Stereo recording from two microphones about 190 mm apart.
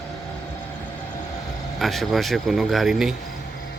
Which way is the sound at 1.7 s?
Centre (ahead or behind).